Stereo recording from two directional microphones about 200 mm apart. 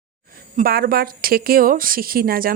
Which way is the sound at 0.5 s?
45° right (ahead or behind).